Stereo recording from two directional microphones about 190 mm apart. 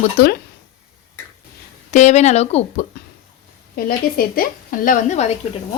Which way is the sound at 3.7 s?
50° left (ahead or behind).